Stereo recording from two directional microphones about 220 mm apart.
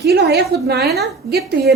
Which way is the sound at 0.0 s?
50° right (ahead or behind).